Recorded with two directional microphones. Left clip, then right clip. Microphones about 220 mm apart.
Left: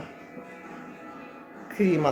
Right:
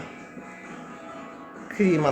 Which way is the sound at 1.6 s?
Centre (ahead or behind).